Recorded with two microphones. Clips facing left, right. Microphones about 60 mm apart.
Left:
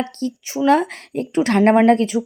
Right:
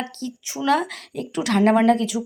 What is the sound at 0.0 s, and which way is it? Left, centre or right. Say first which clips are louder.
Speech: left 6 dB; left.